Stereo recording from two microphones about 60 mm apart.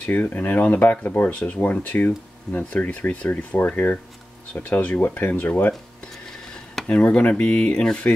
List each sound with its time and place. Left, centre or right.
0.0 s speech: left
1.2 s speech: centre
6.9 s speech: left